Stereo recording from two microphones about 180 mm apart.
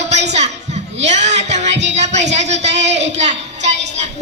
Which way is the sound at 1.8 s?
40° right (ahead or behind).